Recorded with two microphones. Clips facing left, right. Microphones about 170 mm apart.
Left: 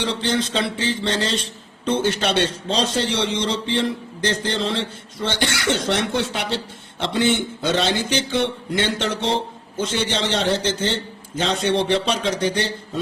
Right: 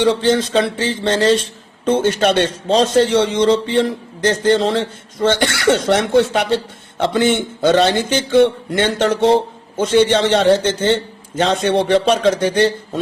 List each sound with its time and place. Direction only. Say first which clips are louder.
0.0 s a man's voice: right 8 dB; 50° right (ahead or behind)